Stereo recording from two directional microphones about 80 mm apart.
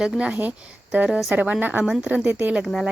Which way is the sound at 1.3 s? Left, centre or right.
Centre.